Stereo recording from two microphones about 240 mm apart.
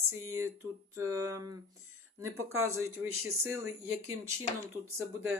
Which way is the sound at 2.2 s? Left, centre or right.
Right.